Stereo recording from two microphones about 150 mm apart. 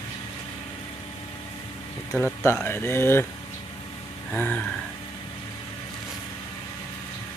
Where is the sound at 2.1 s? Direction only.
15° left (ahead or behind).